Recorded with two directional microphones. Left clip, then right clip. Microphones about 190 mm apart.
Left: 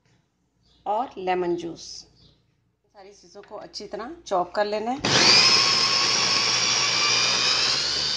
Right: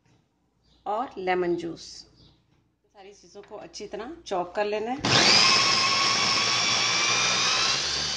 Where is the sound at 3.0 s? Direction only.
5° left (ahead or behind).